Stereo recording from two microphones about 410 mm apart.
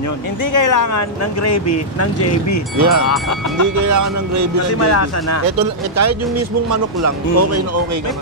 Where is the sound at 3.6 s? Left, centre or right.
Right.